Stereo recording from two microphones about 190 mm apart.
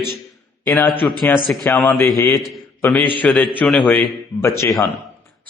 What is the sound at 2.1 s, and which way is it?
Speech, 15° left (ahead or behind).